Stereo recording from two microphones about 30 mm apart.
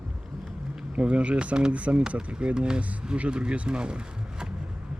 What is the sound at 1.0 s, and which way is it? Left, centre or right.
Speech, right.